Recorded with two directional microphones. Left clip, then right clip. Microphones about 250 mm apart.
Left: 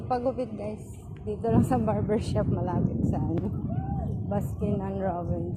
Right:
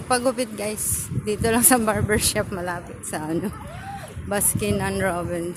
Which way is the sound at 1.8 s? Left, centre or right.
Right.